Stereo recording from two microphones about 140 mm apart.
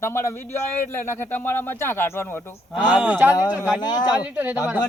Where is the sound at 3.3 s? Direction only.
25° left (ahead or behind).